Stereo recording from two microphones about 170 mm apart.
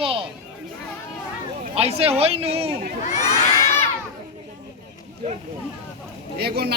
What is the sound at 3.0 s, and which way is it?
Children shouting, 45° left (ahead or behind).